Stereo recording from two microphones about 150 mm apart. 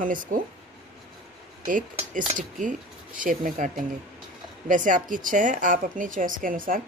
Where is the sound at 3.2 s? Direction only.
60° right (ahead or behind).